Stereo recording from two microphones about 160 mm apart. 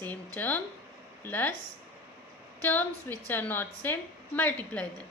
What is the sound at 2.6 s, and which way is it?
A woman's voice, 10° left (ahead or behind).